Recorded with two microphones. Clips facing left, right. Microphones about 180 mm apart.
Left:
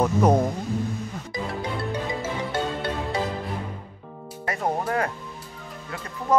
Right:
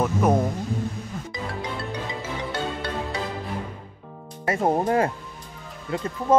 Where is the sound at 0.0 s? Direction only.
15° left (ahead or behind).